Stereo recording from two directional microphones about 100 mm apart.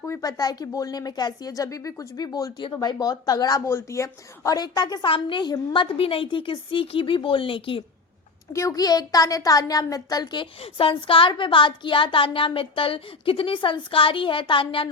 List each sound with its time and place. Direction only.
0.0 s speech: 35° left (ahead or behind)
3.7 s speech: 25° left (ahead or behind); by 4.9 s 45° left (ahead or behind)
5.0 s a woman's voice: 60° left (ahead or behind)
6.0 s a woman's voice: 65° left (ahead or behind)
8.5 s speech: 35° left (ahead or behind)
10.4 s a woman's voice: 70° left (ahead or behind)